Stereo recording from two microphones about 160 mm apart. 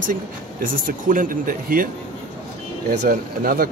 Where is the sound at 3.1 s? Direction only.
65° right (ahead or behind).